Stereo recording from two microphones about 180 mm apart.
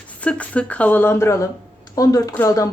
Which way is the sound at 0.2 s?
5° left (ahead or behind).